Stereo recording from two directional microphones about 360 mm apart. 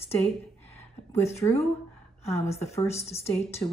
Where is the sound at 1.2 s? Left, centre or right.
Centre.